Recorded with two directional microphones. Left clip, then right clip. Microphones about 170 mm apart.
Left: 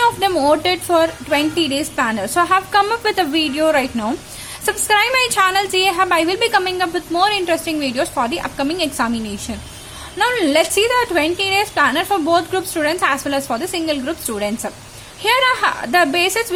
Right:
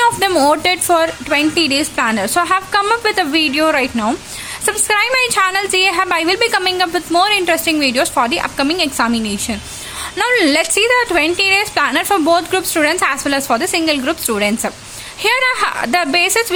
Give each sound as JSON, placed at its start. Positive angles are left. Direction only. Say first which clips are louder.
{"t": 0.0, "sound": "a woman's voice", "louder": "right 3 dB", "side_deg": -15}